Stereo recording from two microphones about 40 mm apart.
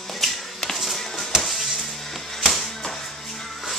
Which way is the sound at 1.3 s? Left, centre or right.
Centre.